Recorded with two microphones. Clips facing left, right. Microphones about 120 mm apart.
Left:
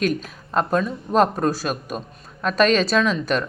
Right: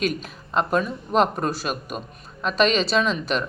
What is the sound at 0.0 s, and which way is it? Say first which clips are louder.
Speech: left 3 dB; 45° left (ahead or behind).